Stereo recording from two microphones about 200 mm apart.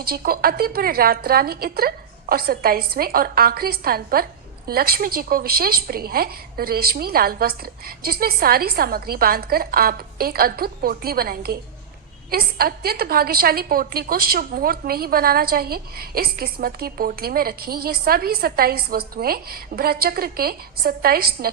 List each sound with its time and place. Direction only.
0.0 s a woman's voice: 50° right (ahead or behind)